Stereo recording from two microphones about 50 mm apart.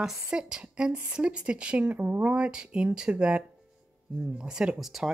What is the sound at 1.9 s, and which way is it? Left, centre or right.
Speech, right.